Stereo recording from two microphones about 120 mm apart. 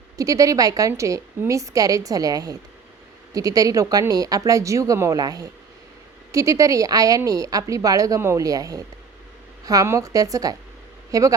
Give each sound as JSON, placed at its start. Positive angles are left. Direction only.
{"t": 0.2, "sound": "a woman's voice", "side_deg": -30}